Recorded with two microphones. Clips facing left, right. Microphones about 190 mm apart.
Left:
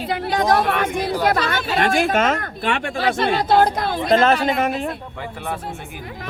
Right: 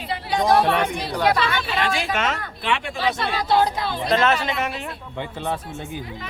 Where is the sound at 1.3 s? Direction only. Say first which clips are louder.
Left 2 dB; 45° left (ahead or behind).